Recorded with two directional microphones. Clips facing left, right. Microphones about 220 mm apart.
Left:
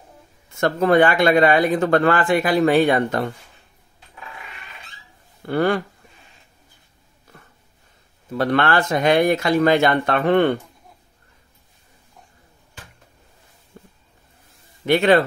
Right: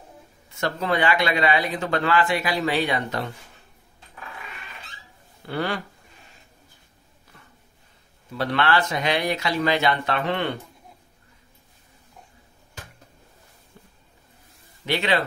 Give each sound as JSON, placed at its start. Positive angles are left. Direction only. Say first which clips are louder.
{"t": 0.6, "sound": "speech", "louder": "left 8 dB", "side_deg": 50}
{"t": 5.5, "sound": "speech", "louder": "left 8 dB", "side_deg": 50}
{"t": 7.3, "sound": "a sound", "louder": "left 4 dB", "side_deg": 50}
{"t": 8.4, "sound": "speech", "louder": "left 4 dB", "side_deg": 50}
{"t": 13.7, "sound": "a sound", "louder": "left 7 dB", "side_deg": 50}
{"t": 14.9, "sound": "speech", "louder": "left 8 dB", "side_deg": 50}